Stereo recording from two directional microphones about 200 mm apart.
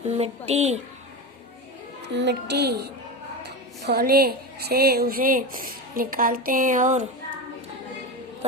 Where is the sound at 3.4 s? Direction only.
50° right (ahead or behind).